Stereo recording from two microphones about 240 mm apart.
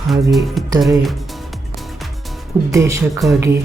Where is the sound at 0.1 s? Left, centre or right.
Centre.